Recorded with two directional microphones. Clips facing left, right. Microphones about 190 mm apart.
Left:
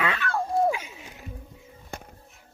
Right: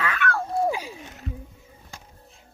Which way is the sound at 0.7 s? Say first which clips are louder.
Even; 35° right (ahead or behind).